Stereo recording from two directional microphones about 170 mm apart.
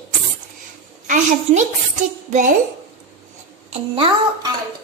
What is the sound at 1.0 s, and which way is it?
Speech, 45° right (ahead or behind).